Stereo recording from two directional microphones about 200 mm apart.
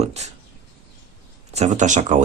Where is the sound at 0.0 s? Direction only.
35° right (ahead or behind).